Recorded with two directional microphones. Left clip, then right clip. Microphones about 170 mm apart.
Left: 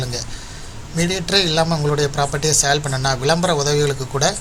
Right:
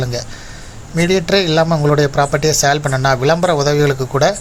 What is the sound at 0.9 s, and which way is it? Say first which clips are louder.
Speech: right 4 dB; 50° right (ahead or behind).